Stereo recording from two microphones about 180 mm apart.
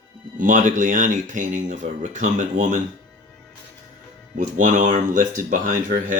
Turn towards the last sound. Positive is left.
turn(degrees=-45)  # may be behind; listen again after turning